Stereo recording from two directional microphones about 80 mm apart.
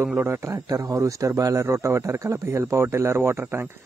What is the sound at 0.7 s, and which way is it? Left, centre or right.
A man's voice, right.